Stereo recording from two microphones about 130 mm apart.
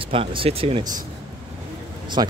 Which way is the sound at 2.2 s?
30° right (ahead or behind).